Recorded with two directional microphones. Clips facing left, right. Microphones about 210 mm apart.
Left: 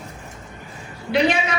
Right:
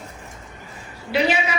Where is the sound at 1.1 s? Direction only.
5° right (ahead or behind).